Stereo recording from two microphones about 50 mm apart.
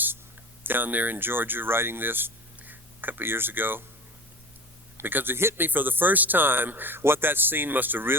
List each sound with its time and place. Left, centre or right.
0.6 s speech: right
4.9 s speech: right
5.6 s speech: right